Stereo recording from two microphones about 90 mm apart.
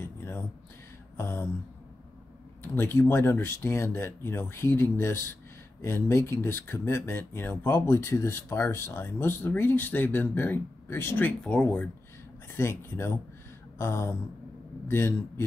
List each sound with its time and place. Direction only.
0.0 s a sound: 25° left (ahead or behind)
2.6 s speech: 25° left (ahead or behind)
12.5 s speech: 30° left (ahead or behind)